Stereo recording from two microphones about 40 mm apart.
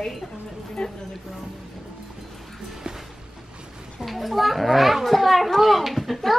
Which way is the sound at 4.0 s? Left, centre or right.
Centre.